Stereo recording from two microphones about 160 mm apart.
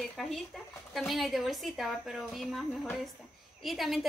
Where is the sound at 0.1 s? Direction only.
Centre (ahead or behind).